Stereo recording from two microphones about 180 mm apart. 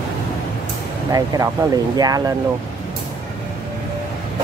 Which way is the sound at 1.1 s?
20° right (ahead or behind).